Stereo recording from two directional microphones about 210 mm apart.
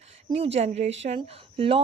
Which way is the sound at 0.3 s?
30° right (ahead or behind).